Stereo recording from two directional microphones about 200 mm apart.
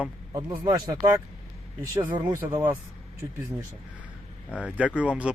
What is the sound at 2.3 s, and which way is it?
Speech, 10° right (ahead or behind).